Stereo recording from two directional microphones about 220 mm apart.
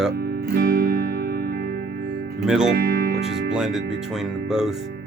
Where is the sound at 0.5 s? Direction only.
45° right (ahead or behind).